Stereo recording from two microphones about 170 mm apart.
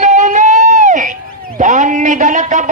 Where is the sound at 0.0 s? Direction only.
45° right (ahead or behind).